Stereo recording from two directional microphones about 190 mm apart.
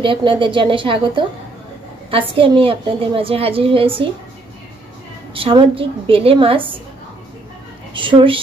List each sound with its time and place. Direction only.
0.0 s a woman's voice: 25° right (ahead or behind)
5.3 s a woman's voice: 30° right (ahead or behind)
7.9 s a woman's voice: 25° right (ahead or behind)